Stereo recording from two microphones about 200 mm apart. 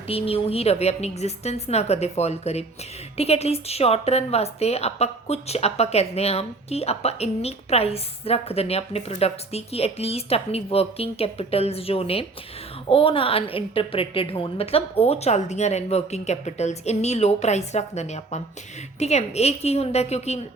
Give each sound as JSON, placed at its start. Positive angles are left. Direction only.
{"t": 0.1, "sound": "a woman's voice", "side_deg": 30}